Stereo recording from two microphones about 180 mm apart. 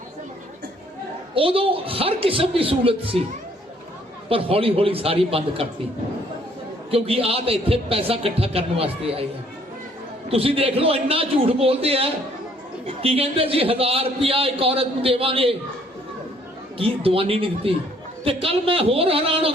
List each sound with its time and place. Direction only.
1.4 s a man's voice: 30° right (ahead or behind)
4.3 s a man's voice: 30° right (ahead or behind)
6.9 s a man's voice: 30° right (ahead or behind)
10.2 s a man's voice: 30° right (ahead or behind)
16.7 s a man's voice: 30° right (ahead or behind)